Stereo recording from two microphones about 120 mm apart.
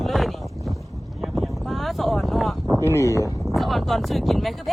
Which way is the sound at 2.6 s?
30° right (ahead or behind).